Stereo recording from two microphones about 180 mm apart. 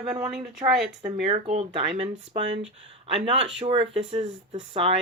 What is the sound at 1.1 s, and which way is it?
Speech, 35° right (ahead or behind).